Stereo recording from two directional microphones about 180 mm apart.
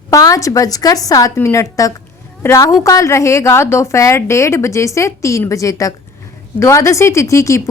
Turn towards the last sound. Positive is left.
turn(degrees=15)  # may be behind; listen again after turning